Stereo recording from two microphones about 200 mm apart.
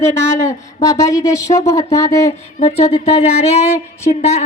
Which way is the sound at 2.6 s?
30° left (ahead or behind).